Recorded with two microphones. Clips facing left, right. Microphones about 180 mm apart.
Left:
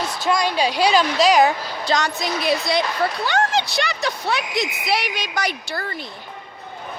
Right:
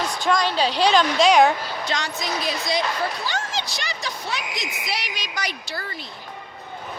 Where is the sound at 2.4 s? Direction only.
65° left (ahead or behind).